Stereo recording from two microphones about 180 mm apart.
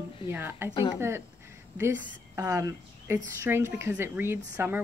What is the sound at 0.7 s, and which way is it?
Speech, 25° left (ahead or behind).